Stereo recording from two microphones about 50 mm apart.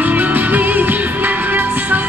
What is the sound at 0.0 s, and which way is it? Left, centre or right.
Music, right.